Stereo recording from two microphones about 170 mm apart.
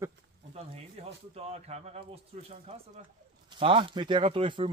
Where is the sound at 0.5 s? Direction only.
40° right (ahead or behind).